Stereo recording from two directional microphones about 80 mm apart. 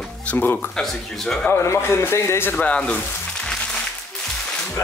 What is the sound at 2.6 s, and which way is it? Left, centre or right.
Speech, centre.